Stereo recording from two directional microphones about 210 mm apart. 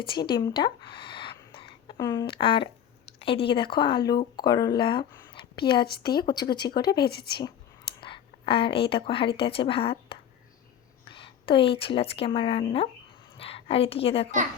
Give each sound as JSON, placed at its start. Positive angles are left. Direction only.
{"t": 0.1, "sound": "a woman's voice", "side_deg": 20}
{"t": 8.0, "sound": "a woman's voice", "side_deg": 25}